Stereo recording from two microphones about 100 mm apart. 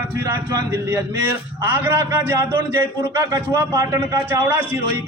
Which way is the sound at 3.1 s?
35° right (ahead or behind).